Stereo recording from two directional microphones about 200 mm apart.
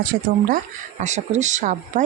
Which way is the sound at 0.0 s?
45° right (ahead or behind).